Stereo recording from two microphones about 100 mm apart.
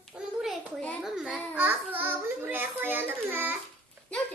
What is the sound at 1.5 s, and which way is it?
A child's voice, 15° right (ahead or behind).